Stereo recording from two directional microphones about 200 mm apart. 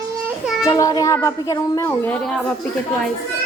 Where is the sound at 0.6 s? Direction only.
15° left (ahead or behind).